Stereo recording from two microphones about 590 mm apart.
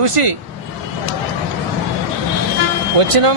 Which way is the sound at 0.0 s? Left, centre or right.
Right.